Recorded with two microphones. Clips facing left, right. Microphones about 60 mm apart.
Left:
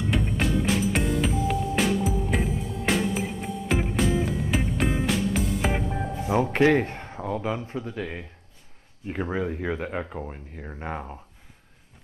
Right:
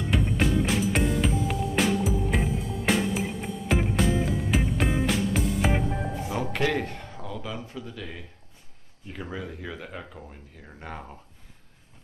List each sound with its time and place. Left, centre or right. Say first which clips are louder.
0.0 s music: even; centre
6.2 s speech: left 8 dB; left